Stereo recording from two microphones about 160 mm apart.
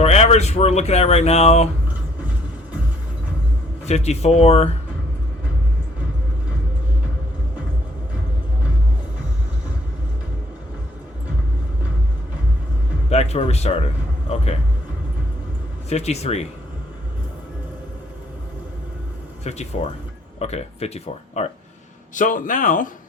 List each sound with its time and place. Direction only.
0.0 s speech: 40° left (ahead or behind)
3.8 s speech: 45° left (ahead or behind)
13.1 s speech: 45° left (ahead or behind)
15.9 s speech: 40° left (ahead or behind)
19.5 s speech: 40° left (ahead or behind)
22.1 s speech: 55° left (ahead or behind)